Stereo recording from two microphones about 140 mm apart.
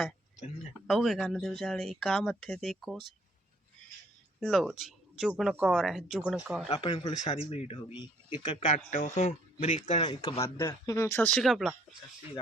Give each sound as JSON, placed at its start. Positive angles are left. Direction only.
{"t": 0.9, "sound": "speech", "side_deg": 0}
{"t": 4.4, "sound": "speech", "side_deg": 0}
{"t": 6.7, "sound": "speech", "side_deg": 30}
{"t": 7.3, "sound": "speech", "side_deg": 45}
{"t": 8.9, "sound": "speech", "side_deg": 60}
{"t": 10.0, "sound": "speech", "side_deg": 30}
{"t": 10.4, "sound": "speech", "side_deg": 20}
{"t": 11.3, "sound": "speech", "side_deg": 0}